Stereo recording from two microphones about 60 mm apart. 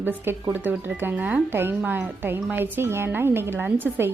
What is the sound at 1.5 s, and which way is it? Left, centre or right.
A woman's voice, right.